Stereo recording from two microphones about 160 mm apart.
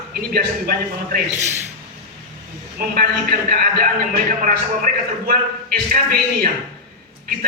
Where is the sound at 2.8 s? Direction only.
65° right (ahead or behind).